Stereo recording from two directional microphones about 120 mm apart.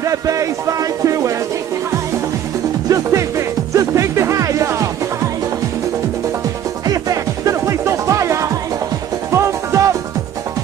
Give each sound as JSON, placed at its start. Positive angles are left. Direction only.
{"t": 0.0, "sound": "speech", "side_deg": -30}
{"t": 2.9, "sound": "music", "side_deg": -25}
{"t": 6.9, "sound": "music", "side_deg": -30}